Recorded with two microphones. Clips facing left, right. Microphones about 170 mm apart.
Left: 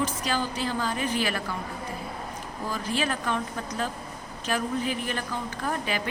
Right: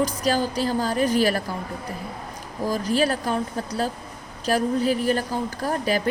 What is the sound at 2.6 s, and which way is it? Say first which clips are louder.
A woman's voice: right 7 dB; 40° right (ahead or behind).